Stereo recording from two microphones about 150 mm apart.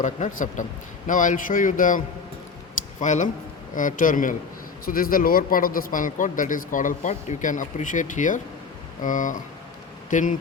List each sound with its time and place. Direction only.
0.0 s a man's voice: 60° left (ahead or behind)
3.0 s a man's voice: 55° left (ahead or behind)
4.9 s a man's voice: 70° left (ahead or behind)